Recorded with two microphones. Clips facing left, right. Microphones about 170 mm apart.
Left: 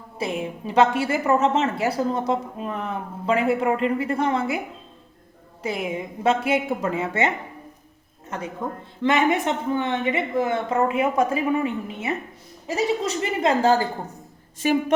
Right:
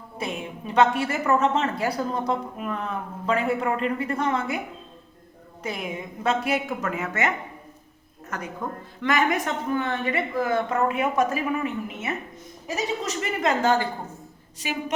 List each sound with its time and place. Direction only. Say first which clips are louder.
0.2 s a woman's voice: left 4 dB; 30° left (ahead or behind)
5.6 s a woman's voice: left 4 dB; 25° left (ahead or behind)
9.0 s a woman's voice: left 3 dB; 25° left (ahead or behind)
14.6 s a woman's voice: left 9 dB; 50° left (ahead or behind)